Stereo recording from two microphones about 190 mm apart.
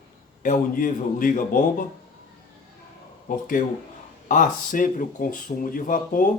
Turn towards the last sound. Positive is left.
turn(degrees=45)  # may be behind; listen again after turning